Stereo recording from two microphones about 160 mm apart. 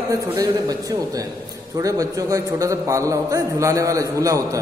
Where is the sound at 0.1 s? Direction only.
20° right (ahead or behind).